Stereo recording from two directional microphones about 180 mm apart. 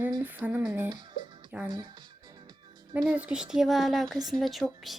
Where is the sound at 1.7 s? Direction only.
25° right (ahead or behind).